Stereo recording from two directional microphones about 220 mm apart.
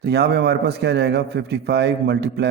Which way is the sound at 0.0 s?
50° right (ahead or behind).